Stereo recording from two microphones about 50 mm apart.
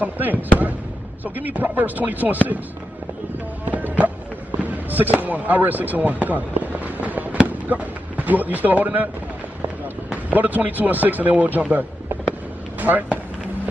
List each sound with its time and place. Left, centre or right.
0.0 s speech: right
3.6 s music: right
4.6 s speech: right
10.1 s speech: right
12.8 s speech: right